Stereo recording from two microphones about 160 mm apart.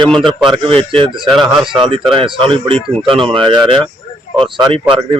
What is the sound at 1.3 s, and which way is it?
Speech, 5° right (ahead or behind).